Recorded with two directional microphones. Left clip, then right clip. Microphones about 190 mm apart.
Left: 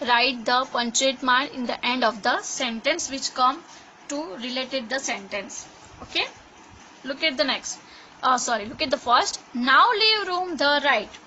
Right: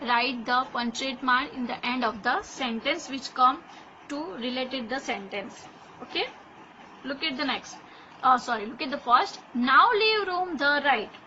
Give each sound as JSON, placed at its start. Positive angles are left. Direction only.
{"t": 0.0, "sound": "a woman's voice", "side_deg": 60}
{"t": 7.1, "sound": "a woman's voice", "side_deg": 65}